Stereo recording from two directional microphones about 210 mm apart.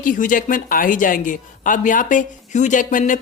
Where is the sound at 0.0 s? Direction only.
40° left (ahead or behind).